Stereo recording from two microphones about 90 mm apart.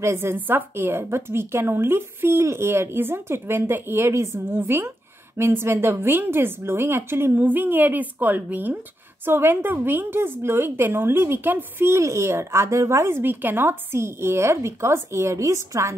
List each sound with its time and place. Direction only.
0.0 s a woman's voice: 30° right (ahead or behind)